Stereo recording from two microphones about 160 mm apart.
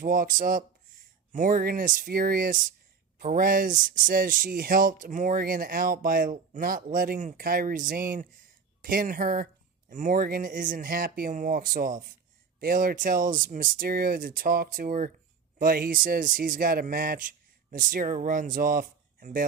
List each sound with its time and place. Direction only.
0.0 s speech: 60° right (ahead or behind)